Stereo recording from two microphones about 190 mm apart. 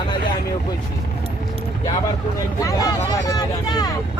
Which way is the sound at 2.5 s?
20° left (ahead or behind).